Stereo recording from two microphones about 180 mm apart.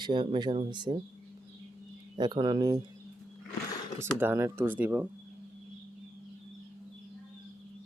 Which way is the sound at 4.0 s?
15° right (ahead or behind).